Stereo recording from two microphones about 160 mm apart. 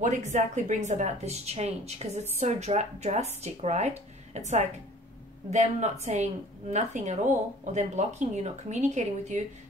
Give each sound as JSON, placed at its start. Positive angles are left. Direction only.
{"t": 0.0, "sound": "a woman's voice", "side_deg": -50}